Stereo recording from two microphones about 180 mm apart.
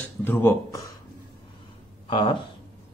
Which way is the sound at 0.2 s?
10° left (ahead or behind).